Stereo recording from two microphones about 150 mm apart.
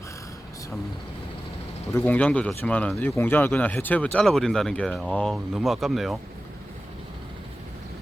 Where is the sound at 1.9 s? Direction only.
15° left (ahead or behind).